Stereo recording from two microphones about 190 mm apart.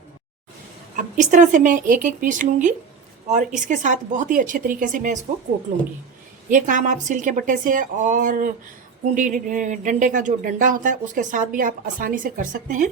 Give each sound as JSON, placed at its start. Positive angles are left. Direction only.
{"t": 0.9, "sound": "speech", "side_deg": -40}
{"t": 6.5, "sound": "speech", "side_deg": -45}